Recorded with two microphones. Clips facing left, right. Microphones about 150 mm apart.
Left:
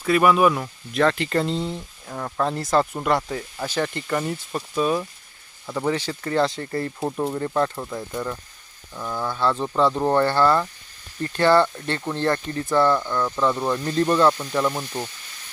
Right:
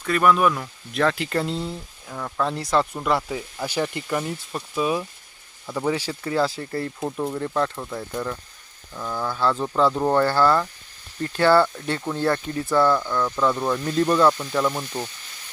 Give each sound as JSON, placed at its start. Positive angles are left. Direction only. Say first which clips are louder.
{"t": 0.0, "sound": "speech", "louder": "left 2 dB", "side_deg": 5}
{"t": 0.9, "sound": "speech", "louder": "left 2 dB", "side_deg": 0}
{"t": 2.0, "sound": "speech", "louder": "left 1 dB", "side_deg": 10}
{"t": 2.5, "sound": "speech", "louder": "left 2 dB", "side_deg": 0}
{"t": 7.0, "sound": "speech", "louder": "left 2 dB", "side_deg": 20}
{"t": 7.3, "sound": "speech", "louder": "left 1 dB", "side_deg": 5}